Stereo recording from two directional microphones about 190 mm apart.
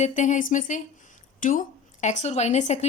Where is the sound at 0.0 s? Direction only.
40° left (ahead or behind).